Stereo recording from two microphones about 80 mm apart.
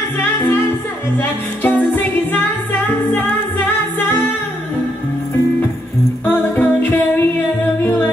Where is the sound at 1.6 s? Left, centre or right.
Left.